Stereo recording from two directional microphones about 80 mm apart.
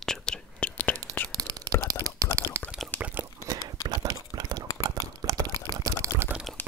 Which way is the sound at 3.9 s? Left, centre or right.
Right.